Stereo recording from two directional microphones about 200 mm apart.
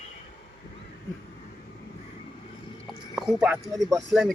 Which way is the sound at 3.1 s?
5° right (ahead or behind).